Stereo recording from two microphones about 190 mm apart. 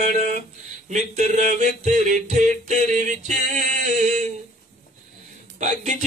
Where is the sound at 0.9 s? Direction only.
40° right (ahead or behind).